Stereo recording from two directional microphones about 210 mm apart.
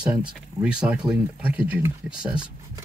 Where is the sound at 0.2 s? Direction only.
5° right (ahead or behind).